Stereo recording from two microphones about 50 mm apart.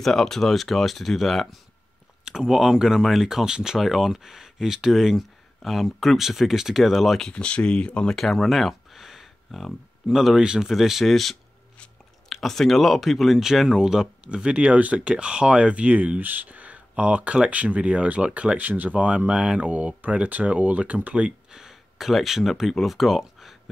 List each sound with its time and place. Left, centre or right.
0.0 s speech: centre
2.2 s speech: centre
7.2 s speech: left
8.2 s a sound: centre
10.0 s speech: centre
19.6 s speech: right
21.5 s speech: centre